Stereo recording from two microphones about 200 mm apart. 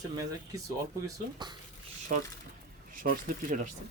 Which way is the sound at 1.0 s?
20° right (ahead or behind).